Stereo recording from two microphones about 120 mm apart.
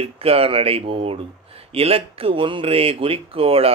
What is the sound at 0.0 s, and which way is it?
Speech, 55° right (ahead or behind).